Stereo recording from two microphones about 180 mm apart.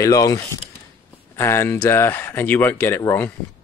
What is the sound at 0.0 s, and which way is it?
Speech, 20° left (ahead or behind).